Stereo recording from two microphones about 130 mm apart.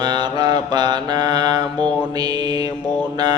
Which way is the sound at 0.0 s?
35° right (ahead or behind).